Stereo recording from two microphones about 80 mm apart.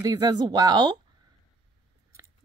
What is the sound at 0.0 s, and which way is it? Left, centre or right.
Speech, right.